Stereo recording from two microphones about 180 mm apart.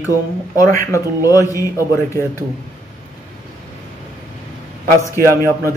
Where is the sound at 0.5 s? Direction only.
15° left (ahead or behind).